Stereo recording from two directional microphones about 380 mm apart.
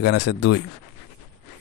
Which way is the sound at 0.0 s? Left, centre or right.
Left.